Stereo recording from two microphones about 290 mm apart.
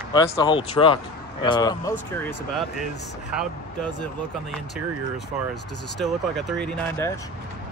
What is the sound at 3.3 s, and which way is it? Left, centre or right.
Speech, centre.